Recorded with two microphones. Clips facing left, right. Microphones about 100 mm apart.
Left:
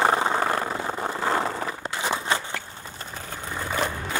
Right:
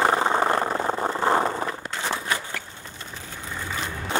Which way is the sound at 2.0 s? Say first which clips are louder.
Left 2 dB; 15° left (ahead or behind).